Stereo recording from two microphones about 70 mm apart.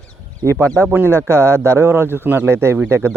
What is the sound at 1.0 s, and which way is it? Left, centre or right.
Speech, right.